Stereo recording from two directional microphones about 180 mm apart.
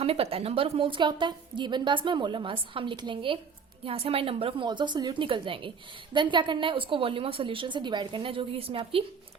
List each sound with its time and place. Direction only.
0.0 s a woman's voice: 35° right (ahead or behind)